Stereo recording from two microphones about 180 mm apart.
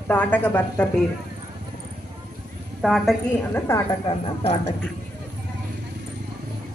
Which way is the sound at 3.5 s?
15° left (ahead or behind).